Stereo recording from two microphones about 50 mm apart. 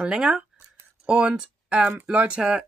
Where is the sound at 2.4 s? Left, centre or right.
Centre.